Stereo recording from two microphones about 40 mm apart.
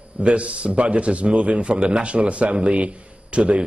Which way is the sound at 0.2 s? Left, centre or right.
Right.